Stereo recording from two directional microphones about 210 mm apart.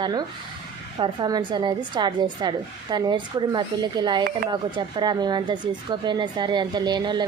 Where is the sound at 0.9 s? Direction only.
20° right (ahead or behind).